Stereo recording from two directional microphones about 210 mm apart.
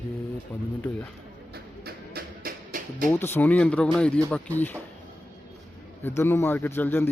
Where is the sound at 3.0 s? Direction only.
10° left (ahead or behind).